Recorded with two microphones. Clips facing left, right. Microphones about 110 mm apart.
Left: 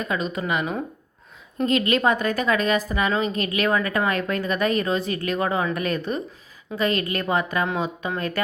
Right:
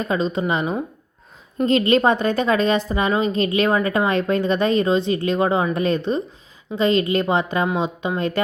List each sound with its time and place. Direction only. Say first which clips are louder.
0.0 s a woman's voice: right 5 dB; 30° right (ahead or behind)